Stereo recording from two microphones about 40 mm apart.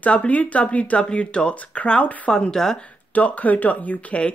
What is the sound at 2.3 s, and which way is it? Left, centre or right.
Speech, centre.